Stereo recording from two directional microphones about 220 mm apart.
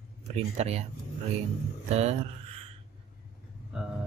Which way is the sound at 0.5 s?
30° right (ahead or behind).